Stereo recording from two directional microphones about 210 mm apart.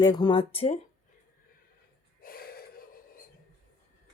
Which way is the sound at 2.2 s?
45° left (ahead or behind).